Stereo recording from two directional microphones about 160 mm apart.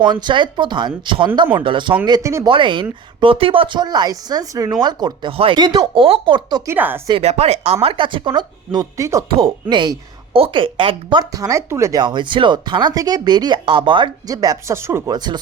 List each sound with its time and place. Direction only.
0.0 s a woman's voice: 30° right (ahead or behind)
6.7 s speech: 10° right (ahead or behind)
7.1 s a woman's voice: 40° right (ahead or behind)